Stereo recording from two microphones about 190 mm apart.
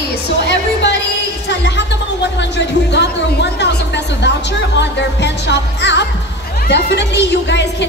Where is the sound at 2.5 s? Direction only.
65° left (ahead or behind).